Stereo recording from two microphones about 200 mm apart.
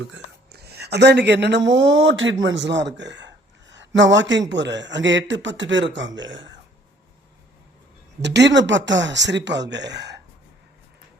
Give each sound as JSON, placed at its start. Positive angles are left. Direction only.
{"t": 0.1, "sound": "a man's voice", "side_deg": -55}
{"t": 8.2, "sound": "a man's voice", "side_deg": -60}